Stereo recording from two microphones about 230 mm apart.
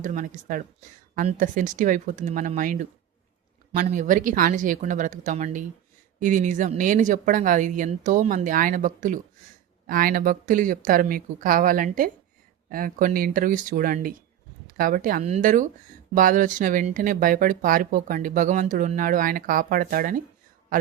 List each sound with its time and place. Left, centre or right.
0.0 s speech: right